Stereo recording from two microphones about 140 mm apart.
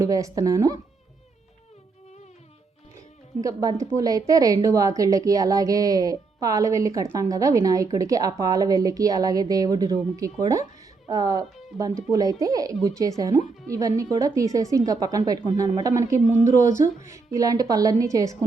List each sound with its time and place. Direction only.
0.0 s a woman's voice: 25° right (ahead or behind)
3.4 s a woman's voice: 25° right (ahead or behind)